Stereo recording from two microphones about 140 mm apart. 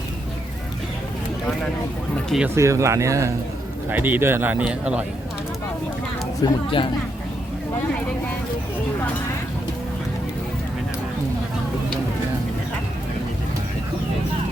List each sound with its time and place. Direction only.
2.6 s a man's voice: 20° right (ahead or behind)
6.4 s speech: 35° left (ahead or behind)